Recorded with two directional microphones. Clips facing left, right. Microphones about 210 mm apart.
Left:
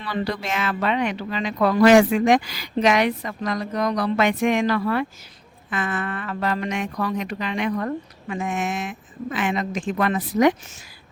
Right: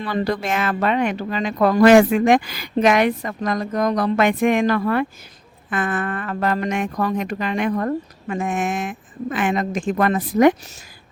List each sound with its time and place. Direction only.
0.0 s speech: 45° right (ahead or behind)